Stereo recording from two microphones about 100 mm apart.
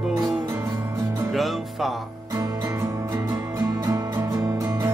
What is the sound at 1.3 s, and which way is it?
Music, centre (ahead or behind).